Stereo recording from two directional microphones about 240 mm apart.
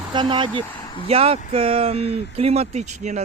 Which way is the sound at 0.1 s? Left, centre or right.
Centre.